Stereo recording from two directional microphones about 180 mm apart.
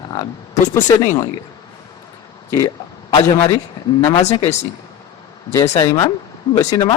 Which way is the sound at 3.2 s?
20° left (ahead or behind).